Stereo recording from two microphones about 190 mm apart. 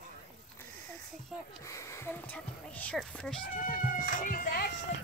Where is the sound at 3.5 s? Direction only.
45° left (ahead or behind).